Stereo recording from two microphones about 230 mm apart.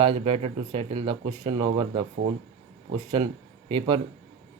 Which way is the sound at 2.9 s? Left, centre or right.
Right.